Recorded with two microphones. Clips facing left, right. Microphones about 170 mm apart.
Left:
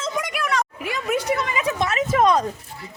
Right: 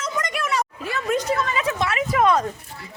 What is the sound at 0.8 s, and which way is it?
A woman's voice, 15° left (ahead or behind).